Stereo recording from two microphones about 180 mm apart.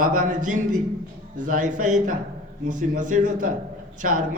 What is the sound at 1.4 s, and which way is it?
A woman's voice, 45° right (ahead or behind).